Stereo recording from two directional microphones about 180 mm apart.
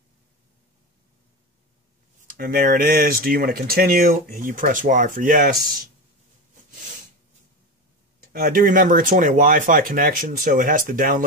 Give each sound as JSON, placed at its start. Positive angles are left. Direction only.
{"t": 2.2, "sound": "speech", "side_deg": -50}
{"t": 8.3, "sound": "speech", "side_deg": -50}